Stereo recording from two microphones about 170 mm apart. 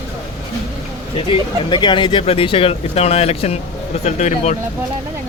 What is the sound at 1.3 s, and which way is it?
Speech, 25° left (ahead or behind).